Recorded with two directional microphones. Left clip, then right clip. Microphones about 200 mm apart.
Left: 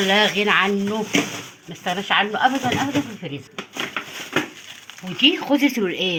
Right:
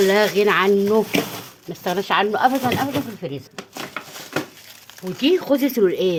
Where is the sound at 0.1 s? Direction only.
60° right (ahead or behind).